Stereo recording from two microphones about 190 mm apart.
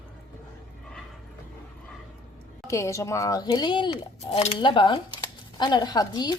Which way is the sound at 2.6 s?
15° left (ahead or behind).